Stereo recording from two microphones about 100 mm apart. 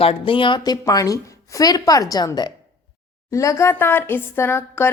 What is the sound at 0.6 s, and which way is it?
A woman's voice, 40° left (ahead or behind).